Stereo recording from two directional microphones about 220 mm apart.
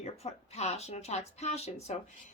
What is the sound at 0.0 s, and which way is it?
A woman's voice, 30° left (ahead or behind).